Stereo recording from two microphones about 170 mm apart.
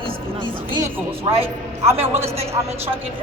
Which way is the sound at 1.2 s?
35° right (ahead or behind).